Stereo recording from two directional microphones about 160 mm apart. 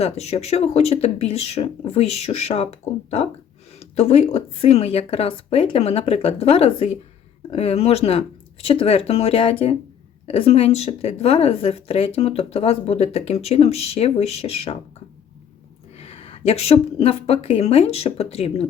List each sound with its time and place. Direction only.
0.0 s a woman's voice: 40° left (ahead or behind)
16.0 s a woman's voice: 40° left (ahead or behind)